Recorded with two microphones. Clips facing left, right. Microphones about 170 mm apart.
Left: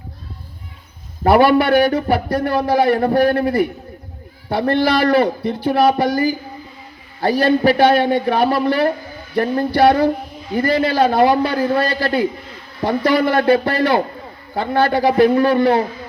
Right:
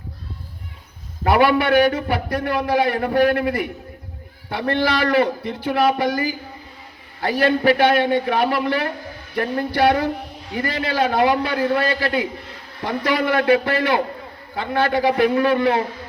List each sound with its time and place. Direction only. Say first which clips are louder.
1.2 s a man's voice: left 4 dB; 30° left (ahead or behind)